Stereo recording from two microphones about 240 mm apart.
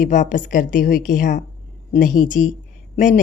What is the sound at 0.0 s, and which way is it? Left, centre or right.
A woman's voice, left.